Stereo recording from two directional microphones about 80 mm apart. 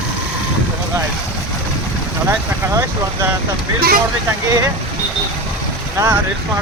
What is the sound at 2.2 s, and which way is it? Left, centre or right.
Speech, right.